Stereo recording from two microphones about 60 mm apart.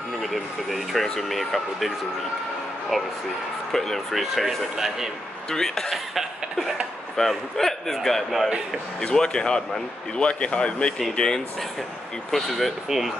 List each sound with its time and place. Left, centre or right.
0.2 s speech: centre
2.9 s speech: centre
5.5 s speech: centre
9.0 s speech: centre